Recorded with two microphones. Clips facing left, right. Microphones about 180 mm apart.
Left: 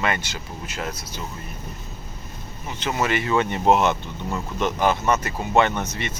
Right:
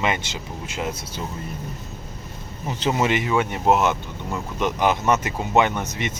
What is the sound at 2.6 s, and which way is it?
Speech, 35° right (ahead or behind).